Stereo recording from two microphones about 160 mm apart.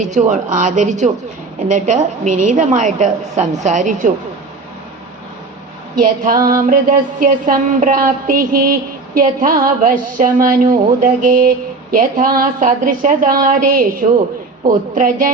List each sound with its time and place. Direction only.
0.0 s a woman's voice: 50° right (ahead or behind)
6.0 s a woman's voice: 60° right (ahead or behind)